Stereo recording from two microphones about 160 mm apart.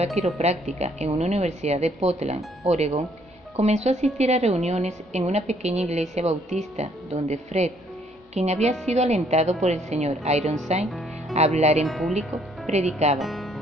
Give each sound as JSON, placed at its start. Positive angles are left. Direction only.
{"t": 0.0, "sound": "a woman's voice", "side_deg": -40}
{"t": 10.9, "sound": "music", "side_deg": 0}
{"t": 11.3, "sound": "a woman's voice", "side_deg": -45}
{"t": 11.8, "sound": "speech", "side_deg": 0}
{"t": 12.6, "sound": "a woman's voice", "side_deg": -45}
{"t": 13.2, "sound": "speech", "side_deg": 0}